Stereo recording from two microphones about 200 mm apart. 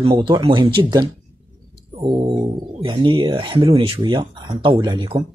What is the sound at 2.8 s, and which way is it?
Speech, 25° right (ahead or behind).